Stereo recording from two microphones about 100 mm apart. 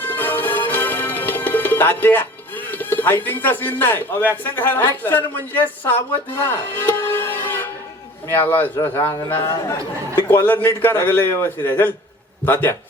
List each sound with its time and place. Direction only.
0.0 s music: 20° left (ahead or behind)
4.4 s a man's voice: 20° left (ahead or behind)